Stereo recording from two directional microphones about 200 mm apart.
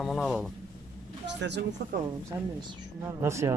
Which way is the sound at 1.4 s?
60° right (ahead or behind).